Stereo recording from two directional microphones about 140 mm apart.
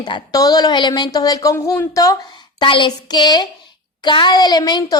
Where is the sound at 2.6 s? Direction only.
35° left (ahead or behind).